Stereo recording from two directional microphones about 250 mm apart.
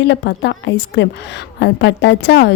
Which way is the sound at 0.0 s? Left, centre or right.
Left.